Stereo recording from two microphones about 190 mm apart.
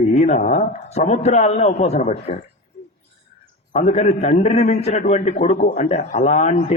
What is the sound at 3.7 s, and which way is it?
A man's voice, 35° left (ahead or behind).